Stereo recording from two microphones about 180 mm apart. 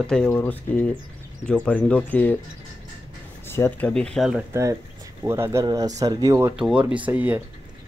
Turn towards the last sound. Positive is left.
turn(degrees=-10)  # may be behind; listen again after turning